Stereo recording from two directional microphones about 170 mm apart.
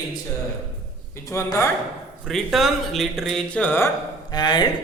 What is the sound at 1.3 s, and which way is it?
Speech, 15° left (ahead or behind).